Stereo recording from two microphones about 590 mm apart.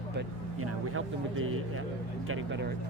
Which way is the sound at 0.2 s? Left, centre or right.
Right.